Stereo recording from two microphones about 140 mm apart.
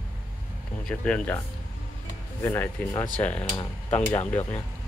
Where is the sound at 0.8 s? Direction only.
10° left (ahead or behind).